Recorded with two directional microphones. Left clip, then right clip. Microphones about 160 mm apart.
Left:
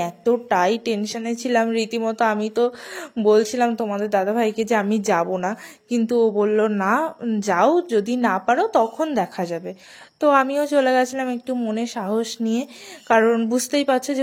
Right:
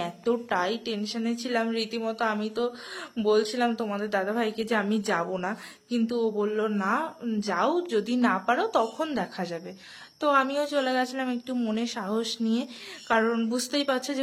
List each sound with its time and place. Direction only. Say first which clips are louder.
0.0 s a woman's voice: left 7 dB; 35° left (ahead or behind)
7.0 s a woman's voice: left 7 dB; 45° left (ahead or behind)